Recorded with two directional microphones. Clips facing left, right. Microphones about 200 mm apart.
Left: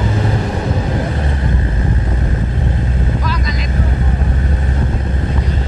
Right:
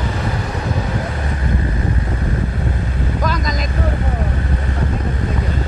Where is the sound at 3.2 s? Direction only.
45° right (ahead or behind).